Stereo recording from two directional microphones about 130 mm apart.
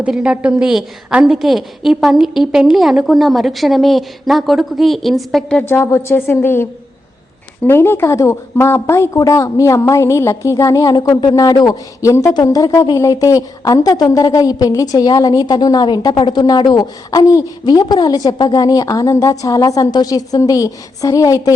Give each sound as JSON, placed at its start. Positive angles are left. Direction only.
{"t": 0.0, "sound": "a woman's voice", "side_deg": -5}